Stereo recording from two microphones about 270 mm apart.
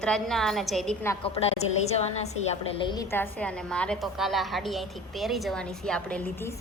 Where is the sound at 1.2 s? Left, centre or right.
Left.